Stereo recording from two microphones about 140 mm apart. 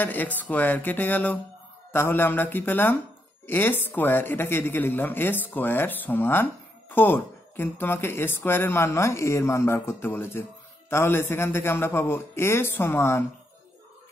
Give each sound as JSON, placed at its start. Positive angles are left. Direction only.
{"t": 0.0, "sound": "speech", "side_deg": 15}